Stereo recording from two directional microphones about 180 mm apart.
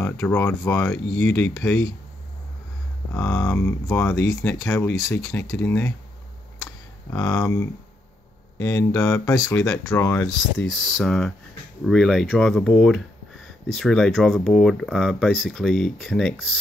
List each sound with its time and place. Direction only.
0.0 s speech: 15° left (ahead or behind)
3.1 s speech: 15° left (ahead or behind)
7.1 s speech: 15° left (ahead or behind)
8.6 s speech: 15° left (ahead or behind)
10.2 s speech: centre (ahead or behind)